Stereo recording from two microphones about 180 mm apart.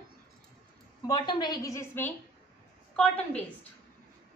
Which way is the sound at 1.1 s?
25° left (ahead or behind).